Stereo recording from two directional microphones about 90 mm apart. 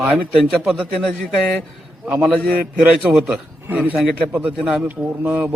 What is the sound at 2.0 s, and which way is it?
A man's voice, 10° right (ahead or behind).